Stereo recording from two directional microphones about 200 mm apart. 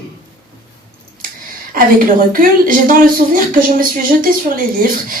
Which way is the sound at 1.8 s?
45° right (ahead or behind).